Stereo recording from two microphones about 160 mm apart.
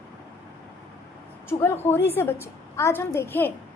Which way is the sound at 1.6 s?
15° left (ahead or behind).